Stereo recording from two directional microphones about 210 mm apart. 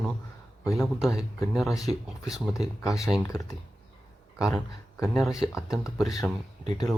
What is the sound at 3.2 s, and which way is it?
Speech, 15° left (ahead or behind).